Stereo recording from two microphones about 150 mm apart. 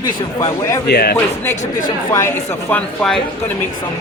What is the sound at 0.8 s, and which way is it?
Speech, 90° left.